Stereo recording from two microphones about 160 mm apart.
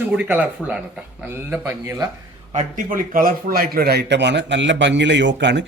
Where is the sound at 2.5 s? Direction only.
55° right (ahead or behind); by 5.7 s 90° right.